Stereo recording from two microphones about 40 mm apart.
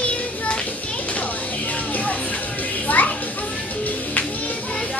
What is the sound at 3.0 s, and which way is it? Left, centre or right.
Children playing, left.